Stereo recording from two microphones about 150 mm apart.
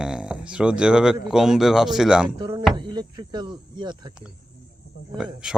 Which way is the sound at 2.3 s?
30° right (ahead or behind).